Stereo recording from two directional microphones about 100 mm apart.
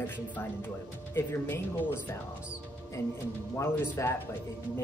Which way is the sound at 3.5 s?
25° left (ahead or behind).